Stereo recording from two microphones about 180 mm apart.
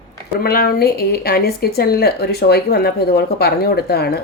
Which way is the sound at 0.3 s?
55° left (ahead or behind).